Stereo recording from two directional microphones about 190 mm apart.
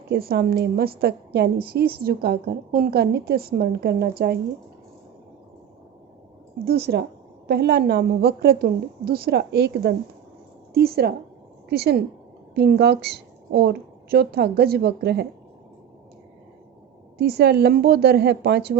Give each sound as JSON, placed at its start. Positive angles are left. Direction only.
{"t": 0.1, "sound": "a woman's voice", "side_deg": -55}
{"t": 6.7, "sound": "a woman's voice", "side_deg": -55}
{"t": 17.2, "sound": "a woman's voice", "side_deg": -60}